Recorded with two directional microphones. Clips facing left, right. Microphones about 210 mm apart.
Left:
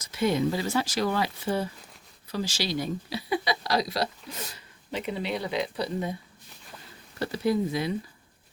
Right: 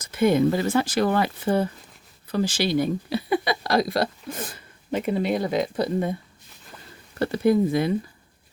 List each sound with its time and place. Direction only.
0.0 s speech: 50° right (ahead or behind)
7.2 s speech: 55° right (ahead or behind)